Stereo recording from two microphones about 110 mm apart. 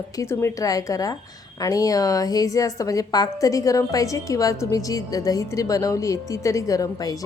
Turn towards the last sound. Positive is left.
turn(degrees=35)  # may be behind; listen again after turning